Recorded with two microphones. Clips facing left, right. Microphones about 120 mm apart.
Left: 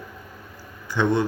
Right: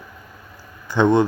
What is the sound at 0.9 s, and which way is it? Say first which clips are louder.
Speech: right 6 dB; 25° right (ahead or behind).